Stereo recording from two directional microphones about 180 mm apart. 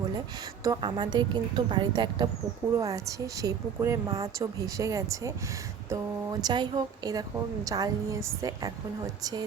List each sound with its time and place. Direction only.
0.6 s a woman's voice: 25° right (ahead or behind)
6.4 s a woman's voice: 25° right (ahead or behind)